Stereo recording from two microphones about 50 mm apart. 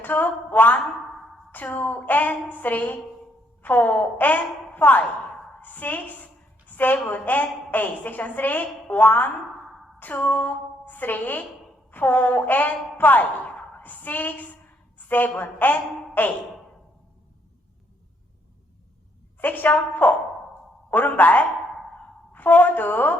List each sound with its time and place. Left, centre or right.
0.0 s a woman's voice: left
19.4 s a woman's voice: left